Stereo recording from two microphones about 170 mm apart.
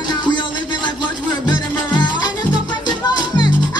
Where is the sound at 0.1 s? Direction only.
25° left (ahead or behind).